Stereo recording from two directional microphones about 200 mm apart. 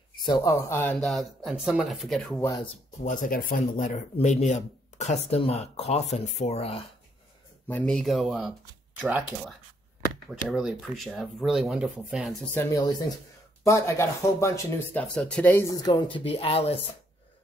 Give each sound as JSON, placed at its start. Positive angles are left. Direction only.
{"t": 0.2, "sound": "speech", "side_deg": 20}
{"t": 2.4, "sound": "speech", "side_deg": 20}
{"t": 3.0, "sound": "speech", "side_deg": 40}
{"t": 7.6, "sound": "speech", "side_deg": 5}
{"t": 10.5, "sound": "speech", "side_deg": 0}
{"t": 12.5, "sound": "speech", "side_deg": 15}
{"t": 15.8, "sound": "speech", "side_deg": 20}